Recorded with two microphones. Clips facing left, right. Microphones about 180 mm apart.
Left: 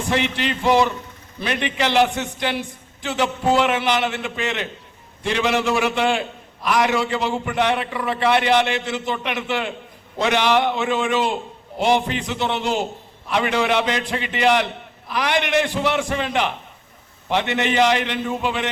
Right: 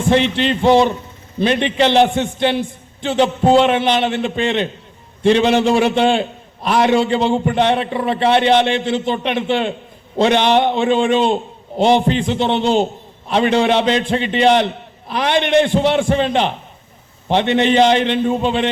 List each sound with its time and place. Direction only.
0.1 s a man's voice: 30° right (ahead or behind)